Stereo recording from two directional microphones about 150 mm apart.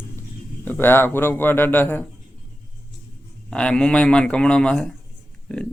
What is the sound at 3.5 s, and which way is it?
Speech, 5° left (ahead or behind).